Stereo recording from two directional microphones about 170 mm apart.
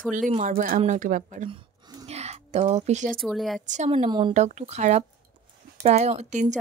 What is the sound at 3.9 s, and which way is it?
Speech, 30° right (ahead or behind).